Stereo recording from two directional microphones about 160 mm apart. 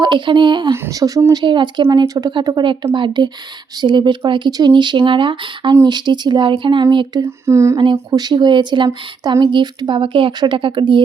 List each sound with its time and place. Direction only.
0.0 s speech: 30° right (ahead or behind)
7.2 s speech: 15° right (ahead or behind)